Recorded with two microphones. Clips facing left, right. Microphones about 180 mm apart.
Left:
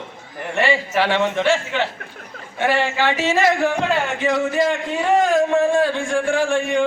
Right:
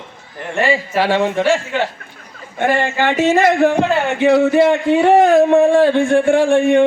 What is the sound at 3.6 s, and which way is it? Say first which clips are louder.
A man's voice: right 5 dB; 60° right (ahead or behind).